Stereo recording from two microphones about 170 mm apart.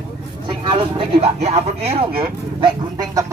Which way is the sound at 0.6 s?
35° right (ahead or behind).